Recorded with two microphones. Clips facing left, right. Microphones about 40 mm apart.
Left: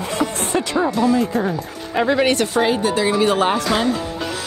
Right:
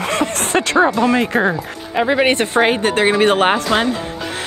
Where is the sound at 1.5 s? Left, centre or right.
Centre; by 3.6 s right.